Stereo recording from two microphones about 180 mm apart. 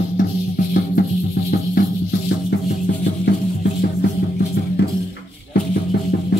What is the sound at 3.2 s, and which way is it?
Music, 70° left (ahead or behind).